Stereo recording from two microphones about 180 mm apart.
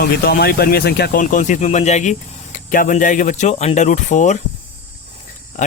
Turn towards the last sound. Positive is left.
turn(degrees=45)  # may be behind; listen again after turning